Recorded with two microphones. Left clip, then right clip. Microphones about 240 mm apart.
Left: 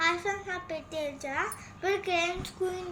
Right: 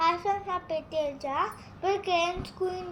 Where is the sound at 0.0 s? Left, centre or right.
Centre.